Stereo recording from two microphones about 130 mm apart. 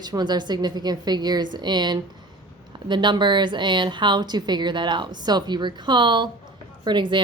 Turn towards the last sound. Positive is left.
turn(degrees=-40)  # may be behind; listen again after turning